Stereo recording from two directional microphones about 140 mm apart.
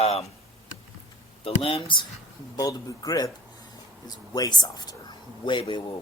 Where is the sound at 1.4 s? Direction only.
40° left (ahead or behind).